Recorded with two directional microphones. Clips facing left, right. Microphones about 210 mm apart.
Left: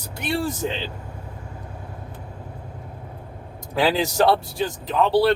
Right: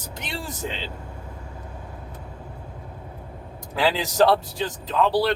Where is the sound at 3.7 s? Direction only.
15° left (ahead or behind).